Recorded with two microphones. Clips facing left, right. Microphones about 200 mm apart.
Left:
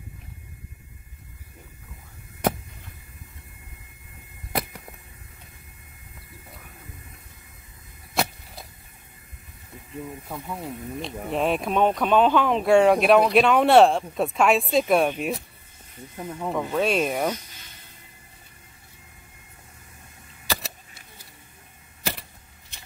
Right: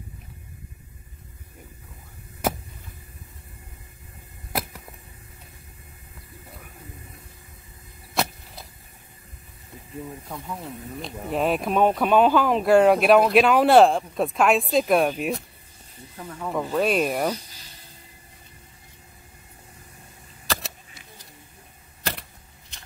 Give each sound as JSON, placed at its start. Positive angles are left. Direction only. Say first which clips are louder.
{"t": 4.5, "sound": "a sound", "louder": "left 1 dB", "side_deg": -5}
{"t": 8.1, "sound": "vehicle", "louder": "even", "side_deg": 0}
{"t": 10.2, "sound": "speech", "louder": "left 1 dB", "side_deg": 5}
{"t": 16.2, "sound": "speech", "louder": "left 3 dB", "side_deg": 20}
{"t": 16.7, "sound": "speech", "louder": "right 1 dB", "side_deg": 0}
{"t": 20.4, "sound": "camera", "louder": "even", "side_deg": 0}